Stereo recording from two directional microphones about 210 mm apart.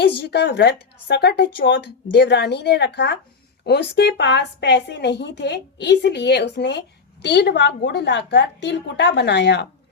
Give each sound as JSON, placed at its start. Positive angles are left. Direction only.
{"t": 0.2, "sound": "a woman's voice", "side_deg": 55}